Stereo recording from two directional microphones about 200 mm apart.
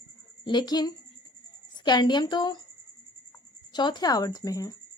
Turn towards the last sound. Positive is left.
turn(degrees=15)  # may be behind; listen again after turning